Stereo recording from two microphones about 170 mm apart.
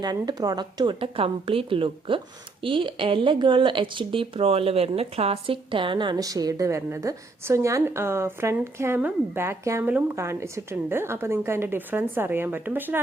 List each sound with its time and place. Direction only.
0.0 s speech: 25° right (ahead or behind)